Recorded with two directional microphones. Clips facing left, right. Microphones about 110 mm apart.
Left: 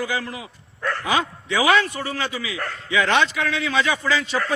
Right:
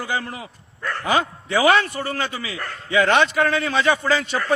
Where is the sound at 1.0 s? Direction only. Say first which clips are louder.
Right 4 dB; 45° right (ahead or behind).